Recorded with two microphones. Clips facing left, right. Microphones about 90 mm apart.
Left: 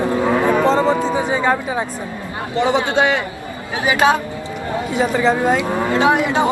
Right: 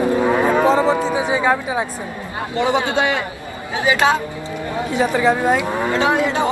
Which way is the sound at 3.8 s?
20° left (ahead or behind).